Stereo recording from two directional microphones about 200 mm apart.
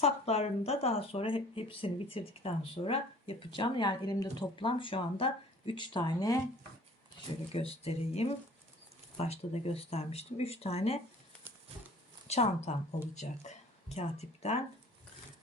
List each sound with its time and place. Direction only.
0.0 s speech: 30° left (ahead or behind)
7.5 s speech: 30° left (ahead or behind)
11.5 s a sound: 10° right (ahead or behind)
12.3 s a woman's voice: 30° left (ahead or behind)